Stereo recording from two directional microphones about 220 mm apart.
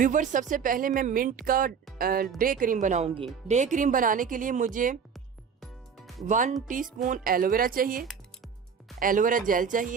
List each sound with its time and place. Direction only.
0.0 s speech: 35° right (ahead or behind)
6.2 s speech: 35° right (ahead or behind)